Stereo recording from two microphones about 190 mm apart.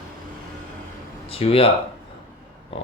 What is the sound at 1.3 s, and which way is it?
Speech, 30° left (ahead or behind).